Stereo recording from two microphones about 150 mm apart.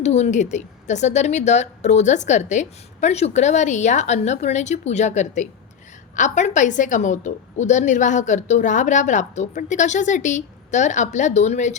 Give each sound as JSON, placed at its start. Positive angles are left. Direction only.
{"t": 0.0, "sound": "a woman's voice", "side_deg": 50}